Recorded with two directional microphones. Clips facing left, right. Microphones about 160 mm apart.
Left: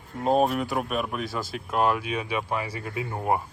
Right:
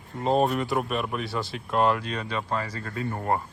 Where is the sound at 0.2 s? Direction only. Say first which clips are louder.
Left 1 dB; centre (ahead or behind).